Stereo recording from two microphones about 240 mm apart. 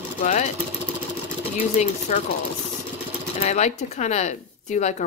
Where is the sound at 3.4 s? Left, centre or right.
Left.